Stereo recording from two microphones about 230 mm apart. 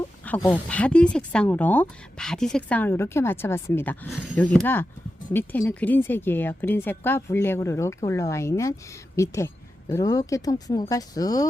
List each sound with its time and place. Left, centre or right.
0.3 s a woman's voice: centre